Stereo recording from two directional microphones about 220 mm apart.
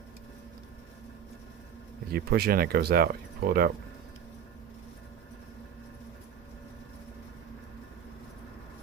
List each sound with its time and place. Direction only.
2.0 s speech: 45° right (ahead or behind)